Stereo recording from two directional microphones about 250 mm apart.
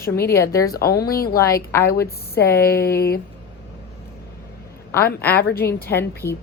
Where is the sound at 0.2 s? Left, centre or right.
Centre.